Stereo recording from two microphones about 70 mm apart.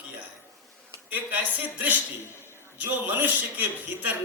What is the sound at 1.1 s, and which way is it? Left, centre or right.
A man's voice, right.